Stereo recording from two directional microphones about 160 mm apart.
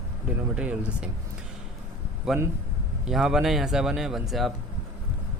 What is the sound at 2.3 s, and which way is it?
Speech, centre (ahead or behind).